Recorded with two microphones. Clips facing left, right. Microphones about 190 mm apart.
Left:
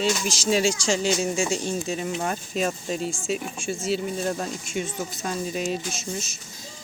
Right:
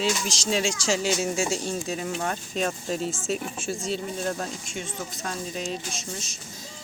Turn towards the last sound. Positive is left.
turn(degrees=5)  # may be behind; listen again after turning